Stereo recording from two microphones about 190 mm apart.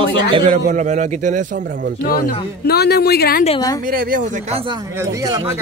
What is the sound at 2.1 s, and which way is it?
A man's voice, 50° left (ahead or behind).